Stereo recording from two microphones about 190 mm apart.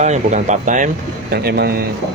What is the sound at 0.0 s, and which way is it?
Speech, 40° right (ahead or behind).